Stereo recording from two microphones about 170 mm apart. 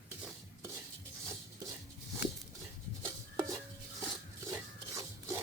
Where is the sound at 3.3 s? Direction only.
20° right (ahead or behind).